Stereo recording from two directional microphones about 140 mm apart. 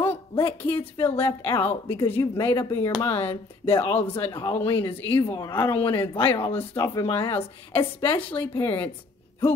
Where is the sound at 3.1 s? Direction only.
45° left (ahead or behind).